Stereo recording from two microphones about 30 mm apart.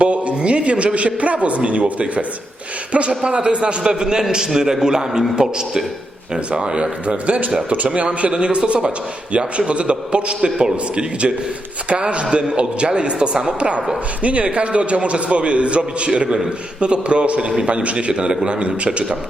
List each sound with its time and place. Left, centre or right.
0.0 s a man's voice: right
3.1 s a man's voice: right
6.5 s a man's voice: right